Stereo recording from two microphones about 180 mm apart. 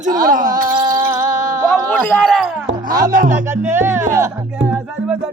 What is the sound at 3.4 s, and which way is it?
Speech, 15° right (ahead or behind).